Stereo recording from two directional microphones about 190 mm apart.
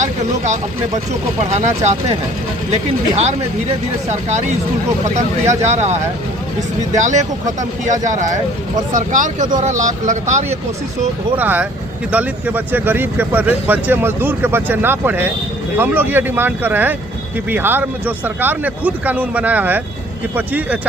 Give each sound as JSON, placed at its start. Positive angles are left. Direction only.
{"t": 0.0, "sound": "speech", "side_deg": -40}
{"t": 4.1, "sound": "speech", "side_deg": -35}
{"t": 7.0, "sound": "speech", "side_deg": -40}
{"t": 8.9, "sound": "speech", "side_deg": -45}
{"t": 11.3, "sound": "speech", "side_deg": -10}